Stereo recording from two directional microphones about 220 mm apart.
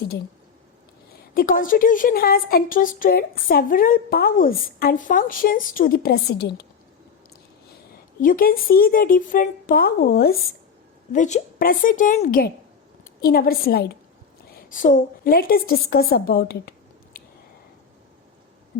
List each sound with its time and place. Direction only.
1.3 s a woman's voice: 40° left (ahead or behind)
8.2 s a woman's voice: 40° left (ahead or behind)
11.1 s a woman's voice: 35° left (ahead or behind)
17.2 s a sound: 40° left (ahead or behind)